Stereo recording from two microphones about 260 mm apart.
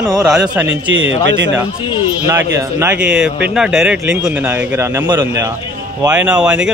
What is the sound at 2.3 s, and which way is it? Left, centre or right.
Speech, centre.